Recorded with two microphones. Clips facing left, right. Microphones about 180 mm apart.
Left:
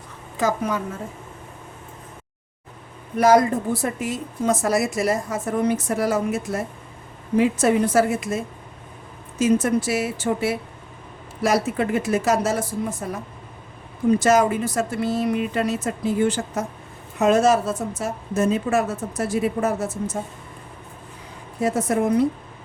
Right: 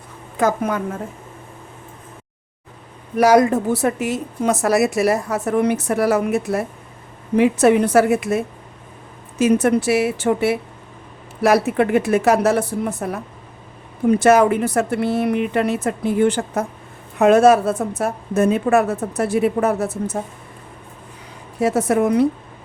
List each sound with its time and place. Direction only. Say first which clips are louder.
0.3 s a woman's voice: right 4 dB; 55° right (ahead or behind)
3.2 s a woman's voice: right 3 dB; 70° right (ahead or behind)
21.6 s a woman's voice: right 4 dB; 70° right (ahead or behind)